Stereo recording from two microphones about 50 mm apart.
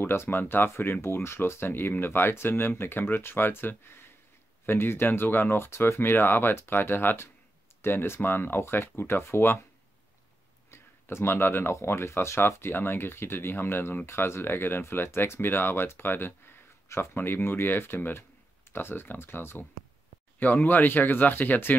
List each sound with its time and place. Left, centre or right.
0.0 s speech: left
10.7 s a sound: left
11.7 s speech: left
20.3 s speech: left